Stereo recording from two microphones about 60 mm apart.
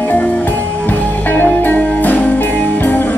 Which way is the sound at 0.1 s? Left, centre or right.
Left.